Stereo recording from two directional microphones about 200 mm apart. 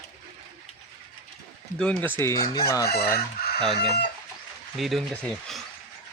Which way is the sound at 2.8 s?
50° left (ahead or behind).